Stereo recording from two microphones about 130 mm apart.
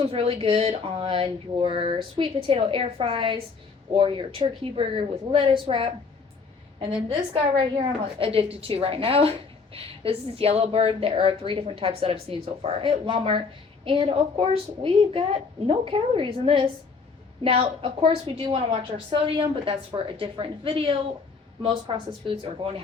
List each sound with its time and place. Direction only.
0.0 s a woman's voice: 45° right (ahead or behind)